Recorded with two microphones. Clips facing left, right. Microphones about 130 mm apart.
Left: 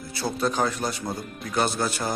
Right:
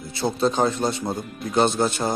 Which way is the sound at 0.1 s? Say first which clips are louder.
Right 4 dB; 25° right (ahead or behind).